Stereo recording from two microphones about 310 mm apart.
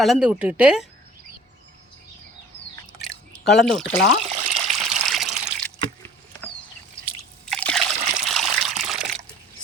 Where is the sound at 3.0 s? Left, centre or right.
Centre.